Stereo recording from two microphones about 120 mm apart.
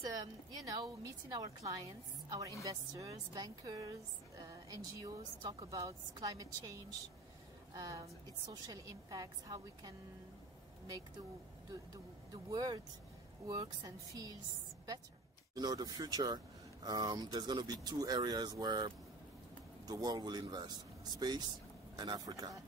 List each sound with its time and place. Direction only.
0.0 s a woman's voice: 35° right (ahead or behind)
12.3 s a woman's voice: 30° right (ahead or behind)
15.5 s a woman's voice: 35° right (ahead or behind)